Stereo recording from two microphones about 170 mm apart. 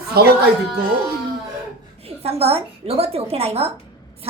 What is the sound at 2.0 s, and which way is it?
A woman's voice, 35° right (ahead or behind).